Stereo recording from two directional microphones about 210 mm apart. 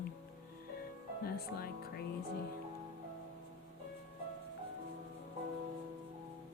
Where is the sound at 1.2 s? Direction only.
45° left (ahead or behind).